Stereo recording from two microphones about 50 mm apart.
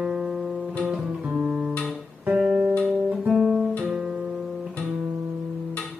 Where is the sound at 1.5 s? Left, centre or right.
Centre.